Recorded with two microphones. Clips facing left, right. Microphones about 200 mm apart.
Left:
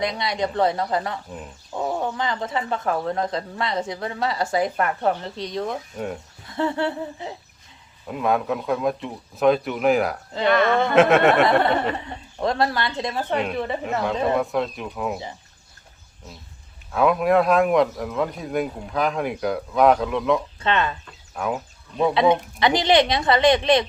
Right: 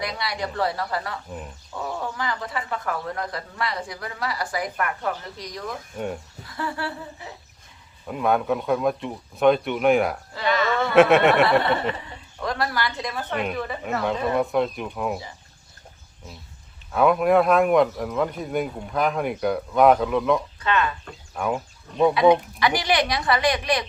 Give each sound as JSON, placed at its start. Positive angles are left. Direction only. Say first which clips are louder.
{"t": 0.0, "sound": "speech", "louder": "left 5 dB", "side_deg": 20}
{"t": 8.0, "sound": "speech", "louder": "even", "side_deg": 0}
{"t": 10.4, "sound": "speech", "louder": "left 4 dB", "side_deg": 55}
{"t": 10.9, "sound": "speech", "louder": "right 1 dB", "side_deg": 0}
{"t": 12.4, "sound": "speech", "louder": "left 4 dB", "side_deg": 25}
{"t": 14.3, "sound": "speech", "louder": "right 1 dB", "side_deg": 0}
{"t": 16.9, "sound": "speech", "louder": "even", "side_deg": 0}
{"t": 20.6, "sound": "speech", "louder": "left 1 dB", "side_deg": 25}
{"t": 21.3, "sound": "speech", "louder": "even", "side_deg": 0}
{"t": 22.1, "sound": "speech", "louder": "even", "side_deg": 25}